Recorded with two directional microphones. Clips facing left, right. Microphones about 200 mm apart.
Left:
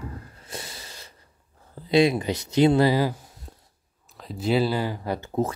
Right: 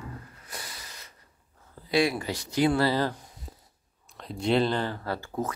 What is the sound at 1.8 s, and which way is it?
Speech, 20° left (ahead or behind).